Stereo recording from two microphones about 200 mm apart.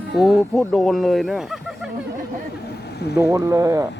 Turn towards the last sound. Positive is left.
turn(degrees=-15)  # may be behind; listen again after turning